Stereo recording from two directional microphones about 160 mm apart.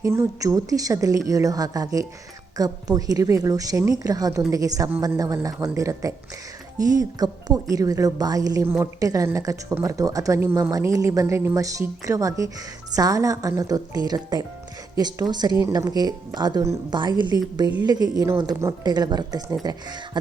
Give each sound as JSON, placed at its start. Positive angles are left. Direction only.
{"t": 0.0, "sound": "a woman's voice", "side_deg": -20}